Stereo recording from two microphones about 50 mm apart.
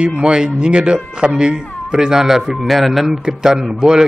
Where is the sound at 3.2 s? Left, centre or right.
Centre.